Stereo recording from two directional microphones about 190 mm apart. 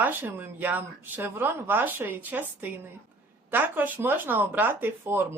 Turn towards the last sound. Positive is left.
turn(degrees=-10)  # may be behind; listen again after turning